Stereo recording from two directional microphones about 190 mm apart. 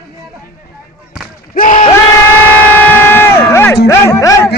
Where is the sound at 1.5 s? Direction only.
45° left (ahead or behind).